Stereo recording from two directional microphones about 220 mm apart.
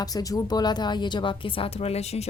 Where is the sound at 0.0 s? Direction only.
15° left (ahead or behind).